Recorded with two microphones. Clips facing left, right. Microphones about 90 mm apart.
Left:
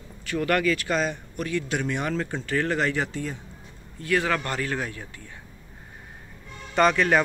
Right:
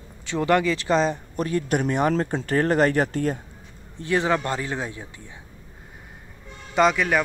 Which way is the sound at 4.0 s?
25° right (ahead or behind).